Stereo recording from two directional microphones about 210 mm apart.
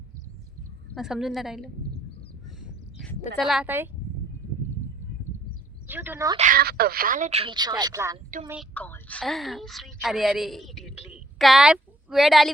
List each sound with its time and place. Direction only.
0.9 s a woman's voice: centre (ahead or behind)
2.6 s duck: 5° right (ahead or behind)
3.3 s a woman's voice: centre (ahead or behind)
5.9 s speech: 10° right (ahead or behind)
6.3 s speech: 40° right (ahead or behind); by 8.2 s 15° right (ahead or behind)
8.7 s a woman's voice: 5° left (ahead or behind)